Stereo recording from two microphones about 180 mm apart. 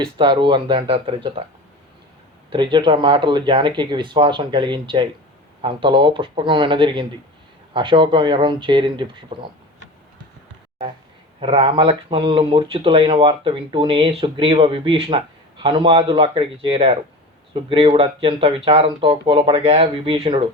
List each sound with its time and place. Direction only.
0.0 s speech: 25° right (ahead or behind)
2.5 s speech: 25° right (ahead or behind)
11.3 s speech: 30° right (ahead or behind)